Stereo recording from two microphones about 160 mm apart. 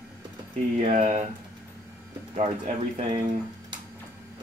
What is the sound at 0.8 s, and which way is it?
Speech, 50° right (ahead or behind).